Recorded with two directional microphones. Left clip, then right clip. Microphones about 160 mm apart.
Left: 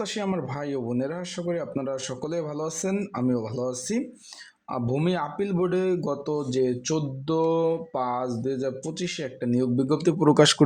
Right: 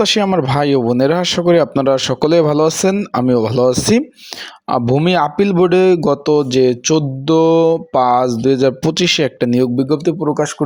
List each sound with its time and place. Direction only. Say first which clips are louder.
0.0 s a man's voice: right 16 dB; 55° right (ahead or behind)
5.0 s a man's voice: right 14 dB; 55° right (ahead or behind)
9.9 s speech: right 9 dB; 30° right (ahead or behind)